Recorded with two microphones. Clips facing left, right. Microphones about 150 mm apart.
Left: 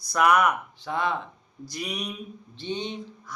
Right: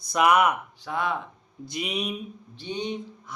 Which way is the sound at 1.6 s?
25° right (ahead or behind).